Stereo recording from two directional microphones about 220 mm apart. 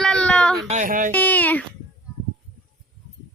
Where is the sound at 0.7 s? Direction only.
35° right (ahead or behind).